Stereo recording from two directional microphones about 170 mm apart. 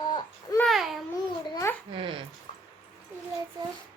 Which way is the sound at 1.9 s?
30° right (ahead or behind).